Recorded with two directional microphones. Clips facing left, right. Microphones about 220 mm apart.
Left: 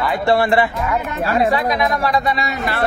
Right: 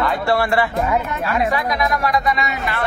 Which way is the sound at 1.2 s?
35° left (ahead or behind).